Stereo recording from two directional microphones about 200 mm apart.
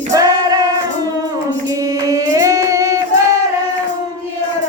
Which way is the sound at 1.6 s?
20° right (ahead or behind).